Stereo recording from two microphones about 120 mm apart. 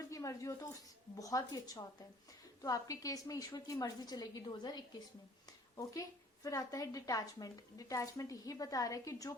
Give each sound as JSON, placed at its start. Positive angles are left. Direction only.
{"t": 0.1, "sound": "a woman's voice", "side_deg": 25}